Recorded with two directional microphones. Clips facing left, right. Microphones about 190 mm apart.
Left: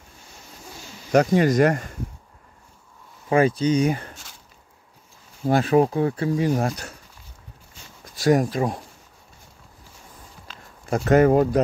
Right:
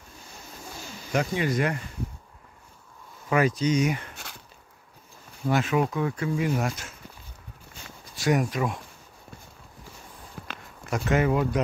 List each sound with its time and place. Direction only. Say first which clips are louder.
1.1 s speech: left 8 dB; 45° left (ahead or behind)
3.3 s speech: left 4 dB; 30° left (ahead or behind)
5.4 s speech: left 6 dB; 35° left (ahead or behind)
8.2 s speech: left 5 dB; 35° left (ahead or behind)
10.4 s a sound: right 9 dB; 65° right (ahead or behind)
10.9 s speech: left 7 dB; 40° left (ahead or behind)